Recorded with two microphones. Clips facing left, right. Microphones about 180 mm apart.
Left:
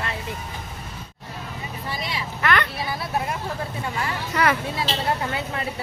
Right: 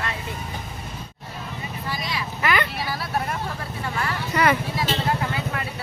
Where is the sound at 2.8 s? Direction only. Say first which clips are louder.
Even; 20° left (ahead or behind).